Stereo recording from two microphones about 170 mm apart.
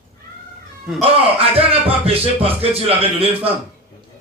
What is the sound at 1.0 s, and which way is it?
Speech, 35° right (ahead or behind).